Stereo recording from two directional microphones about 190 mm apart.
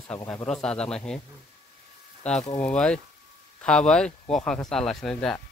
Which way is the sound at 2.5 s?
5° left (ahead or behind).